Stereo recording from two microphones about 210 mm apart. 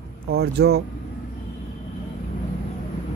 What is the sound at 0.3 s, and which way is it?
Speech, 50° right (ahead or behind).